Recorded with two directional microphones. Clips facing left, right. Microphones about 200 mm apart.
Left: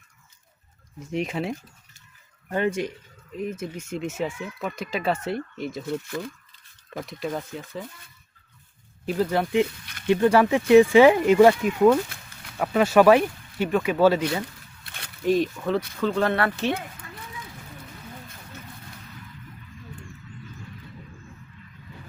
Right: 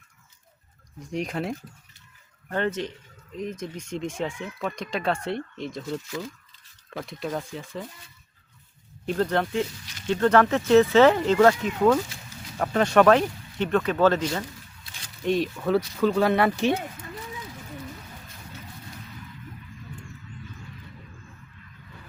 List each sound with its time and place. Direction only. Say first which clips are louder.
0.9 s speech: left 2 dB; centre (ahead or behind)
6.1 s speech: left 2 dB; 55° left (ahead or behind)
6.9 s speech: left 1 dB; centre (ahead or behind)
9.0 s speech: left 1 dB; 5° left (ahead or behind)
14.8 s a sound: left 7 dB; 60° left (ahead or behind)
15.2 s speech: left 2 dB; centre (ahead or behind); by 16.7 s 15° right (ahead or behind)